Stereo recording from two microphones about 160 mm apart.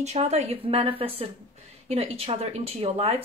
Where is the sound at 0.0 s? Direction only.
45° right (ahead or behind).